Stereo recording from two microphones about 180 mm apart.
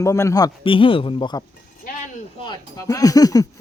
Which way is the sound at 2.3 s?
25° left (ahead or behind).